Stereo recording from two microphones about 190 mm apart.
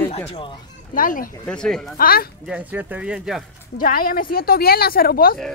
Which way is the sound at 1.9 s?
50° left (ahead or behind).